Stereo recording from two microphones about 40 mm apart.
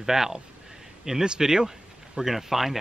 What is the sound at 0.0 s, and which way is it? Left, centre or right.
Speech, centre.